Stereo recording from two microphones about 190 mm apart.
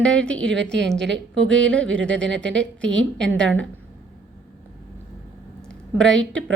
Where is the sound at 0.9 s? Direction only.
70° right (ahead or behind).